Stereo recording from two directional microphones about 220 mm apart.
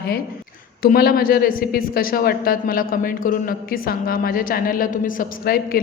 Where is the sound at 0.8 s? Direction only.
40° left (ahead or behind).